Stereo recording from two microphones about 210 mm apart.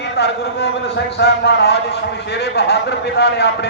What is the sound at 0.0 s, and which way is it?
A man's voice, 55° left (ahead or behind).